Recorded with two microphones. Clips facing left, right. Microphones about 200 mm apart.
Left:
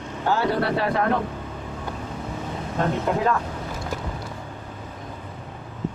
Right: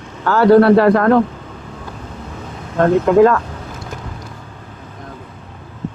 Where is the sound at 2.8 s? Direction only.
85° right.